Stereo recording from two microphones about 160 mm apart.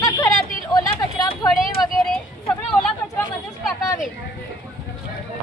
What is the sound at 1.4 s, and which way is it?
Speech, centre (ahead or behind).